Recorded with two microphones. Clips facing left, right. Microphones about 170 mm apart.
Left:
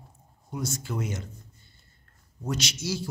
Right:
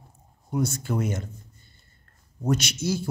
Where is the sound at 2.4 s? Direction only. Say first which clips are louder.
Right 6 dB; 55° right (ahead or behind).